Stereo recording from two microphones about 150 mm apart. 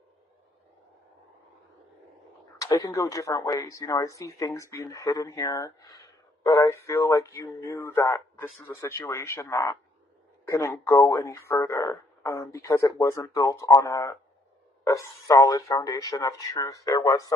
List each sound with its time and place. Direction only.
2.6 s speech: 25° left (ahead or behind)